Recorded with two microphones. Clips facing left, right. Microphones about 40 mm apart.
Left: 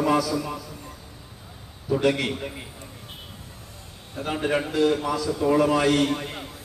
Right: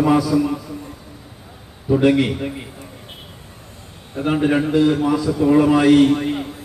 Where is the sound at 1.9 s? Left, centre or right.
Centre.